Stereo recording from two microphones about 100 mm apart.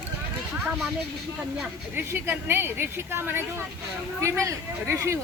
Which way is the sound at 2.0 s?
20° right (ahead or behind).